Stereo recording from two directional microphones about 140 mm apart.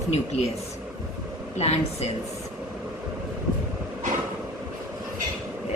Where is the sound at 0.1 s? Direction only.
55° left (ahead or behind).